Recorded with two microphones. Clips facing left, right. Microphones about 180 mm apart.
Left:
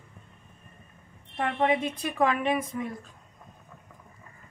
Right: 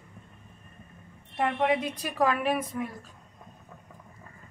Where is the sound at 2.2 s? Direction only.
5° right (ahead or behind).